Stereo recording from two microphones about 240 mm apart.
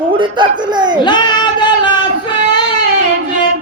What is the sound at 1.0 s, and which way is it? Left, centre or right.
Child singing, centre.